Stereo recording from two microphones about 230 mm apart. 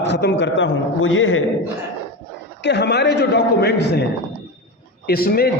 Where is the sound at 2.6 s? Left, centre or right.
Left.